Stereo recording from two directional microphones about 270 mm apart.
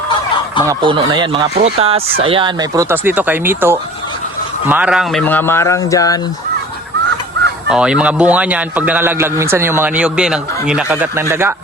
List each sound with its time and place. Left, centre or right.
0.6 s speech: centre
7.7 s a man's voice: centre